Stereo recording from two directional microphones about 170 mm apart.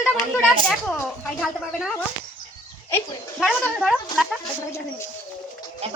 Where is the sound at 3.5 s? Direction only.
5° left (ahead or behind).